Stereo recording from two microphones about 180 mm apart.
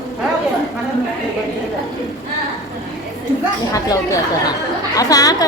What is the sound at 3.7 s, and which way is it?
A woman's voice, 20° left (ahead or behind).